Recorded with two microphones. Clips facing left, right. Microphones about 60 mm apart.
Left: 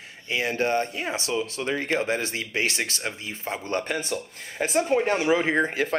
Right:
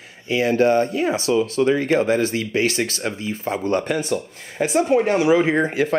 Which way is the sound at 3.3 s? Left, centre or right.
Right.